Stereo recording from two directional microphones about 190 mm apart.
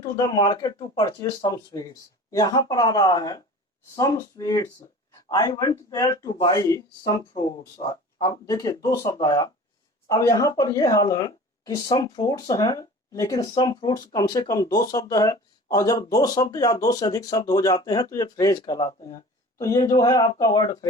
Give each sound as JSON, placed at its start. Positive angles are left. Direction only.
{"t": 0.0, "sound": "speech", "side_deg": 20}